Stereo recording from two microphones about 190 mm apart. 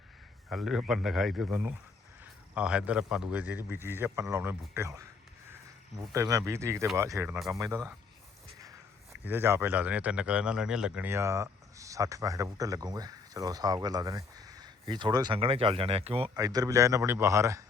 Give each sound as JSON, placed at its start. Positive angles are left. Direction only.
{"t": 0.5, "sound": "speech", "side_deg": 0}
{"t": 1.5, "sound": "a man's voice", "side_deg": -10}
{"t": 6.0, "sound": "a man's voice", "side_deg": -15}
{"t": 7.3, "sound": "speech", "side_deg": 0}
{"t": 7.6, "sound": "a man's voice", "side_deg": -15}
{"t": 9.2, "sound": "a man's voice", "side_deg": -10}
{"t": 16.3, "sound": "a man's voice", "side_deg": -20}